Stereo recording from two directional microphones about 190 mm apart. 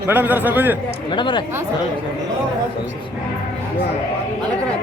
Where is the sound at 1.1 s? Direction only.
25° left (ahead or behind).